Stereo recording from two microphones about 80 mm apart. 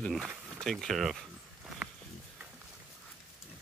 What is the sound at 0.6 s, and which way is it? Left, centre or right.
Speech, centre.